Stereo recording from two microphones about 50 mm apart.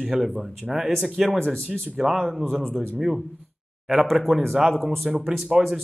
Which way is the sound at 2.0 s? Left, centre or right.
Centre.